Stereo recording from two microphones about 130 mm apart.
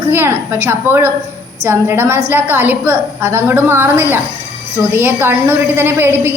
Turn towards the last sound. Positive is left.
turn(degrees=-15)  # may be behind; listen again after turning